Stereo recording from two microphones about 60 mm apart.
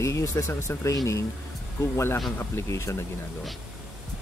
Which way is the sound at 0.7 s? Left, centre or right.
Left.